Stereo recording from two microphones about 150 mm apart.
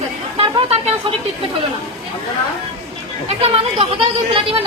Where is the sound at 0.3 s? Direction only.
40° right (ahead or behind).